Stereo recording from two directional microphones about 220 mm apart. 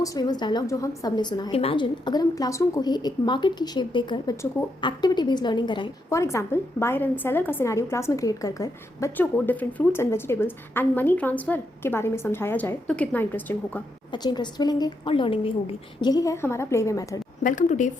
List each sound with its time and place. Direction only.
0.0 s a woman's voice: 15° left (ahead or behind)
14.1 s a woman's voice: 20° left (ahead or behind)
17.4 s a woman's voice: 35° left (ahead or behind)